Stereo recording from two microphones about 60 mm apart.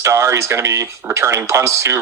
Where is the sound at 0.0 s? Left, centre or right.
Right.